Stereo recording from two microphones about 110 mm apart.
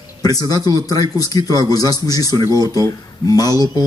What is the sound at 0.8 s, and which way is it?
Speech, 35° left (ahead or behind).